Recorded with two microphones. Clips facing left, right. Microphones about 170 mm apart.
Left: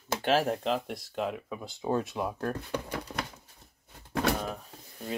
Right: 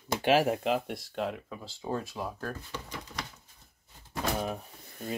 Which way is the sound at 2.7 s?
60° left (ahead or behind).